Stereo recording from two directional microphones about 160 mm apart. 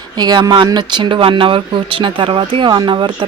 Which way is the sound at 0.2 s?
25° right (ahead or behind).